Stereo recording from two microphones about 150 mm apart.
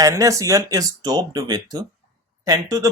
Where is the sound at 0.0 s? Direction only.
20° right (ahead or behind).